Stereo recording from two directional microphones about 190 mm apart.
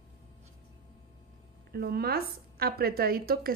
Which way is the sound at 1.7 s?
55° right (ahead or behind).